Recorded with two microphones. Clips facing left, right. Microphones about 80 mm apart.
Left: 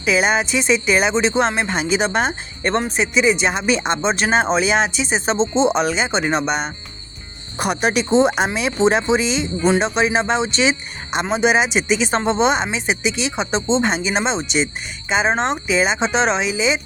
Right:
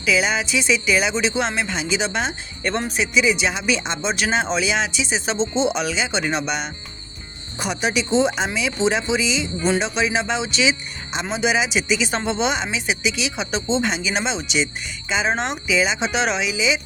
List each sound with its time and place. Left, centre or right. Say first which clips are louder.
0.0 s speech: left 3 dB; left
7.6 s speech: left 4 dB; left